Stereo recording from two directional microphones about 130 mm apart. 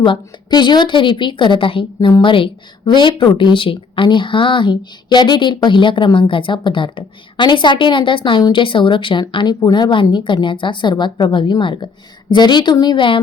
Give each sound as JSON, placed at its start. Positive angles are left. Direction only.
{"t": 0.0, "sound": "a woman's voice", "side_deg": 35}